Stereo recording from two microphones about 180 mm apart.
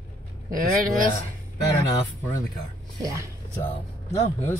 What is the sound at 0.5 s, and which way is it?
Speech, 50° right (ahead or behind).